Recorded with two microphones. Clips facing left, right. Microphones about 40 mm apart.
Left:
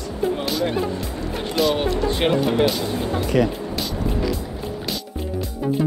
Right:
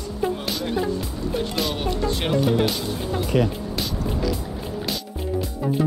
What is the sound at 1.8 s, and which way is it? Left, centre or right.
Speech, left.